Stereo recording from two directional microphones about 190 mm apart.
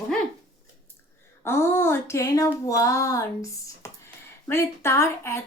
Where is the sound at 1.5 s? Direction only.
10° left (ahead or behind).